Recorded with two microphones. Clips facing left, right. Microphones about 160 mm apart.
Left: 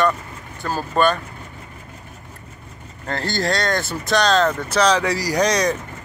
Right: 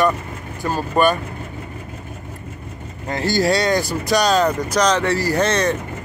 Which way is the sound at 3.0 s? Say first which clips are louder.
Right 4 dB; 10° right (ahead or behind).